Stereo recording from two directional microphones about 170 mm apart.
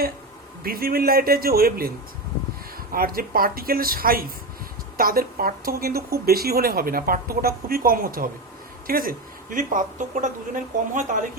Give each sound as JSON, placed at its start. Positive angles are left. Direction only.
{"t": 0.6, "sound": "speech", "side_deg": -60}
{"t": 2.9, "sound": "speech", "side_deg": -60}